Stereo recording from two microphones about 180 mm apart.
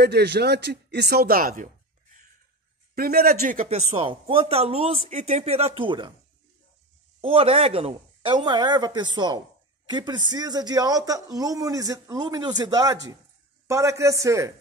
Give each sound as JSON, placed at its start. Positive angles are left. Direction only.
{"t": 0.0, "sound": "speech", "side_deg": -65}
{"t": 2.9, "sound": "speech", "side_deg": -55}
{"t": 7.2, "sound": "a man's voice", "side_deg": -30}